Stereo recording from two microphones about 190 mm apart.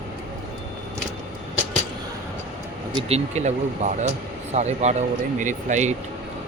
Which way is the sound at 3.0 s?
35° right (ahead or behind).